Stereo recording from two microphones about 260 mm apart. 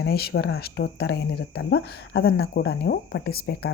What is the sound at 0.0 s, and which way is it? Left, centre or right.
Speech, left.